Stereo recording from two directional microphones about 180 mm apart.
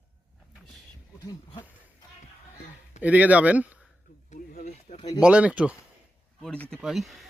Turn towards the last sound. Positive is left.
turn(degrees=0)  # may be behind; listen again after turning